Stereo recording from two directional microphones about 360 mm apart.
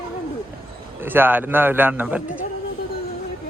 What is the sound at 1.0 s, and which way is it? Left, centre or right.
A man's voice, centre.